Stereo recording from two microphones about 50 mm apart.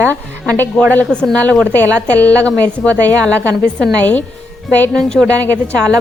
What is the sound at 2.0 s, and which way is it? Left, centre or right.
A woman's voice, left.